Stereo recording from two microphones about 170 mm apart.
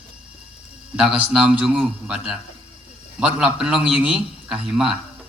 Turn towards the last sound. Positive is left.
turn(degrees=-5)  # may be behind; listen again after turning